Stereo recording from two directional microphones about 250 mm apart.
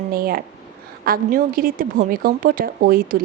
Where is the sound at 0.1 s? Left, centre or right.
Right.